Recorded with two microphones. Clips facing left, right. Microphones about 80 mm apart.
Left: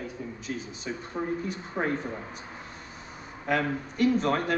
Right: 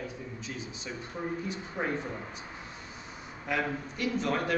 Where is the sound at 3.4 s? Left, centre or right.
Left.